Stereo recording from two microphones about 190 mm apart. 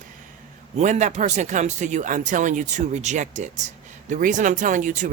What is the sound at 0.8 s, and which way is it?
Speech, 40° right (ahead or behind).